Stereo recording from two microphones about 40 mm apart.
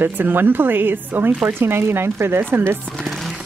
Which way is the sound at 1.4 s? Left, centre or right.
Right.